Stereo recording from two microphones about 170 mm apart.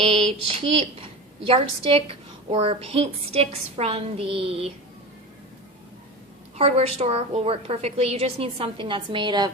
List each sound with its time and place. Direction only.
0.0 s a woman's voice: 35° right (ahead or behind)
6.6 s a woman's voice: 40° right (ahead or behind)